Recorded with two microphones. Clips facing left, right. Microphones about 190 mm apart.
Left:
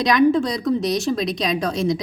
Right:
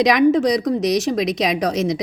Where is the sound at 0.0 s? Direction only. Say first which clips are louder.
Right 2 dB; 90° right.